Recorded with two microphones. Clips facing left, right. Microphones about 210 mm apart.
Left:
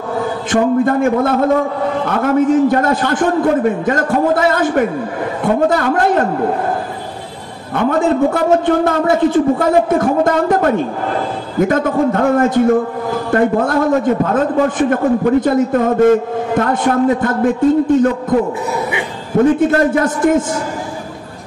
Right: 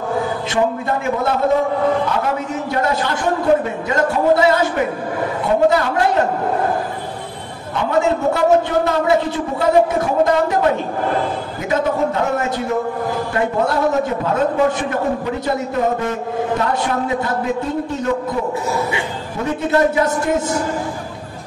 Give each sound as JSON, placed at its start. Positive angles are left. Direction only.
{"t": 0.5, "sound": "a man's voice", "side_deg": 50}
{"t": 7.7, "sound": "a man's voice", "side_deg": 50}
{"t": 18.7, "sound": "speech", "side_deg": 20}
{"t": 19.3, "sound": "a man's voice", "side_deg": 50}